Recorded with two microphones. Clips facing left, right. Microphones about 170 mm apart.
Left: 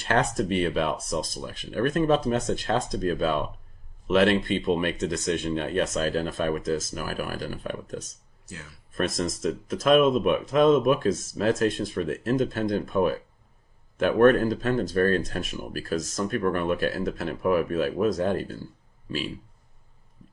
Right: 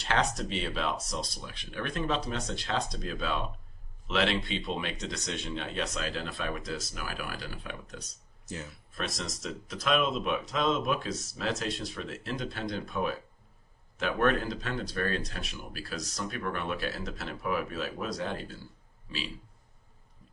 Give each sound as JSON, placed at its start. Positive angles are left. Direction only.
{"t": 0.0, "sound": "speech", "side_deg": 50}